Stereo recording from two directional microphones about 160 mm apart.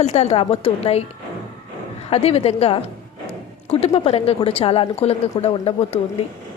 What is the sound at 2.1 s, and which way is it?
Speech, 40° left (ahead or behind).